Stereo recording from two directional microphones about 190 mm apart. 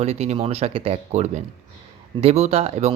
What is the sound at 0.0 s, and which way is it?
Speech, 30° right (ahead or behind).